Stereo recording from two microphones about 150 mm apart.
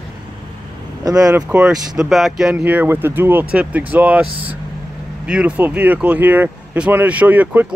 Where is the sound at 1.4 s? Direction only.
5° right (ahead or behind).